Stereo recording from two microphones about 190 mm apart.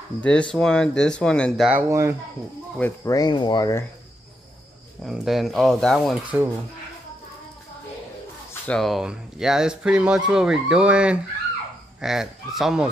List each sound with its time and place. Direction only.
0.2 s speech: 5° left (ahead or behind)
1.7 s speech: 15° right (ahead or behind)
2.8 s speech: 15° left (ahead or behind)
5.0 s speech: centre (ahead or behind)
8.6 s speech: centre (ahead or behind)